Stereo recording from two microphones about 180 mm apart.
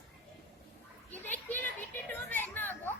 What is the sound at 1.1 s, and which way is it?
Children playing, 10° left (ahead or behind).